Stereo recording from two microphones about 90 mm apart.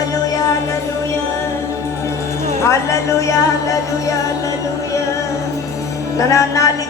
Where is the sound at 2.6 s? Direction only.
35° left (ahead or behind).